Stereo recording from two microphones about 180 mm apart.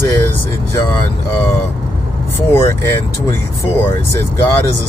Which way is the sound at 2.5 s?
15° left (ahead or behind).